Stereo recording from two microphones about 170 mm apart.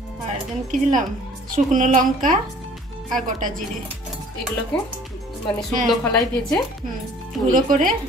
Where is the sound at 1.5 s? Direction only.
50° right (ahead or behind).